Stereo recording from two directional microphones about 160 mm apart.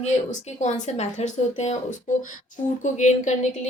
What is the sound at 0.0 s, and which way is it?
A woman's voice, 45° left (ahead or behind).